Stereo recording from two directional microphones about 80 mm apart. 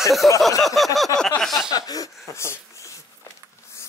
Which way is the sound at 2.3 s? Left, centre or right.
Left.